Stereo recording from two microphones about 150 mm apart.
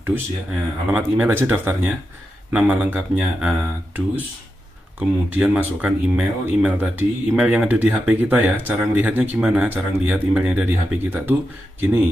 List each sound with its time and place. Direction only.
0.0 s speech: 10° right (ahead or behind)